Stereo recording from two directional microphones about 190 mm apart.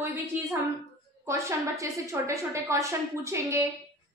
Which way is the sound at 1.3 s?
15° right (ahead or behind).